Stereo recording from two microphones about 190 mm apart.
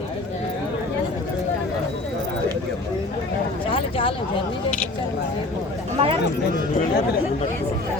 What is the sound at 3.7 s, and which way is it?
Speech, 30° left (ahead or behind).